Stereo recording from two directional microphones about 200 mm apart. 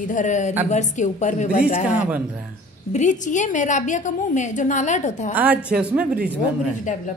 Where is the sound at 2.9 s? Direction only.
35° left (ahead or behind).